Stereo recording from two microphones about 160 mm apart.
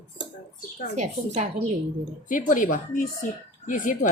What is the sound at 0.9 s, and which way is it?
Speech, 45° right (ahead or behind).